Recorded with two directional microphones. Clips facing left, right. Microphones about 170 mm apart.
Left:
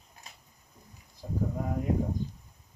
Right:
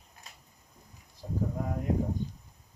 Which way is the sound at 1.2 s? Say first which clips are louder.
Even; 10° left (ahead or behind).